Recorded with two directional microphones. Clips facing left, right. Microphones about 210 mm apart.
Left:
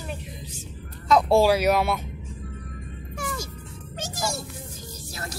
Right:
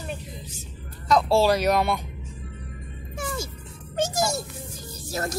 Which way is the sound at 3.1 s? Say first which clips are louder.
Right 2 dB; 25° right (ahead or behind).